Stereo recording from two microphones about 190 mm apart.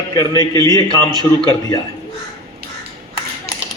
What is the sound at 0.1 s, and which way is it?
Speech, 20° left (ahead or behind).